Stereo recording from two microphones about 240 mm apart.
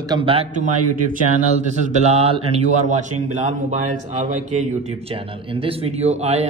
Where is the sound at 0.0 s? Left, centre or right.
Centre.